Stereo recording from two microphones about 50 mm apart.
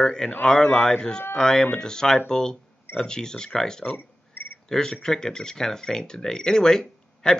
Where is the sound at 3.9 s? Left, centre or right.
Left.